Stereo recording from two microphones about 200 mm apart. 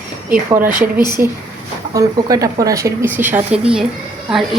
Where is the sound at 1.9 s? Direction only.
15° right (ahead or behind).